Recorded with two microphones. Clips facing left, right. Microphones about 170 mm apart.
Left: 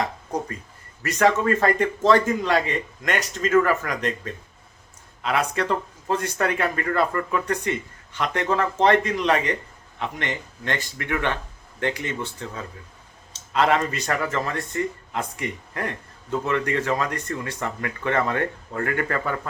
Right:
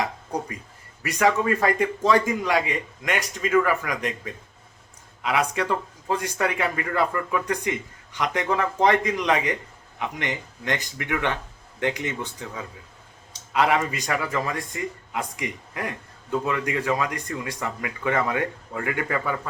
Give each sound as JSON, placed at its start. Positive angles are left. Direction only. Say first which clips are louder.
{"t": 1.0, "sound": "speech", "louder": "left 2 dB", "side_deg": -10}